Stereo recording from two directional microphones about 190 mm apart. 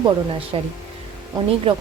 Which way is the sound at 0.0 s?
30° right (ahead or behind).